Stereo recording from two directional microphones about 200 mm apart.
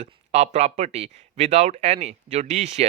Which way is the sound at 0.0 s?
35° right (ahead or behind).